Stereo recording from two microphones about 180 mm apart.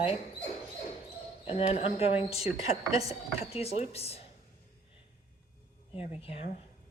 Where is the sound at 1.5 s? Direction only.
35° left (ahead or behind).